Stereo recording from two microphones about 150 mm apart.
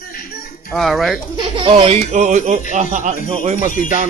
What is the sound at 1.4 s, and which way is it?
Speech, 35° right (ahead or behind).